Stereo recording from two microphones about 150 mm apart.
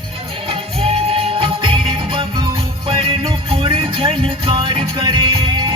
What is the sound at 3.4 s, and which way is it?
Music, 35° right (ahead or behind).